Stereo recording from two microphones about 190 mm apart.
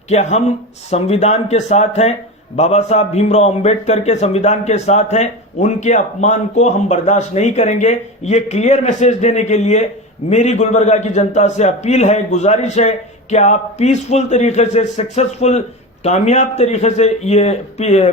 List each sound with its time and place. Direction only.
0.1 s a man's voice: 35° left (ahead or behind)